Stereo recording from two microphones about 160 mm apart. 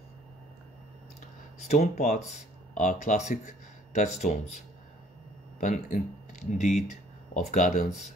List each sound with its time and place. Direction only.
1.7 s speech: 45° left (ahead or behind)
5.6 s speech: 50° left (ahead or behind)
6.6 s a sound: 50° left (ahead or behind)
7.5 s speech: 55° left (ahead or behind)